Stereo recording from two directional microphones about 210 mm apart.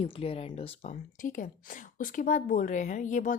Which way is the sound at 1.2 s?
40° left (ahead or behind).